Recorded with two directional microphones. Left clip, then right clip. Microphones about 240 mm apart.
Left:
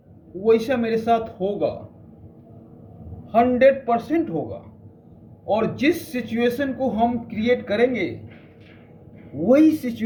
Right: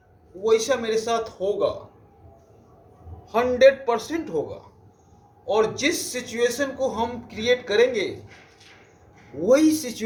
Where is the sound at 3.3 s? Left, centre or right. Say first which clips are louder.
Left 1 dB; centre.